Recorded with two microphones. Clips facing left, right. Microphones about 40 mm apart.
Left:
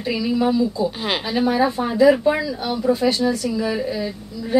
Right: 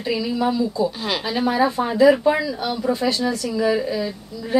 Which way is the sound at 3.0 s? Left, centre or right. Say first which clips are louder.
Left 2 dB; centre.